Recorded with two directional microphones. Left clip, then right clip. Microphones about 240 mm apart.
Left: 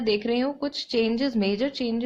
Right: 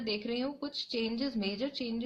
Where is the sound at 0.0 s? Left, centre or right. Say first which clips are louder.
Left 10 dB; left.